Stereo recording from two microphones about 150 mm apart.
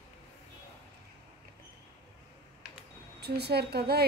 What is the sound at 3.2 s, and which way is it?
Speech, 90° right.